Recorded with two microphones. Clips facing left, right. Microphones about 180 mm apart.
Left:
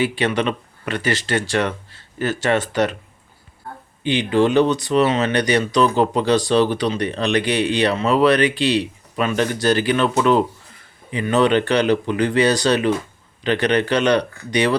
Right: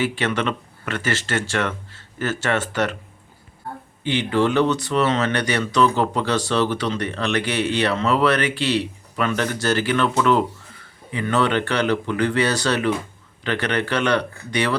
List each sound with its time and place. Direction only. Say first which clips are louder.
0.0 s speech: left 3 dB; 15° left (ahead or behind)
4.0 s speech: left 3 dB; 15° left (ahead or behind)